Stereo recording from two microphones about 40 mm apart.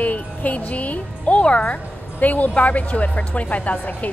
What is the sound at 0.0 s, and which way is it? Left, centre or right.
Speech, left.